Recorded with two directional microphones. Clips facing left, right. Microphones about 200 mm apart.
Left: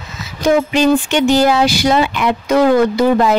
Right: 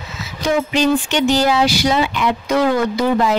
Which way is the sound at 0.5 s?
50° left (ahead or behind).